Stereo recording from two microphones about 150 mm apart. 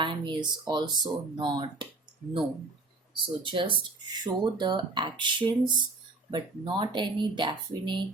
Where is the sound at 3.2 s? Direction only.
35° right (ahead or behind).